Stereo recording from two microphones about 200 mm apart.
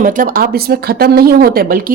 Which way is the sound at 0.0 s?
40° right (ahead or behind).